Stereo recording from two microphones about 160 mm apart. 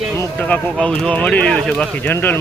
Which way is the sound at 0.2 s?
10° left (ahead or behind).